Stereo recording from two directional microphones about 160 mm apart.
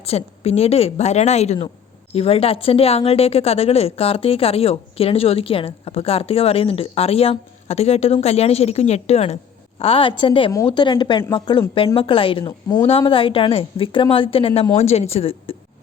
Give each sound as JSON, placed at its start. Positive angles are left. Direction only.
{"t": 0.0, "sound": "a woman's voice", "side_deg": 40}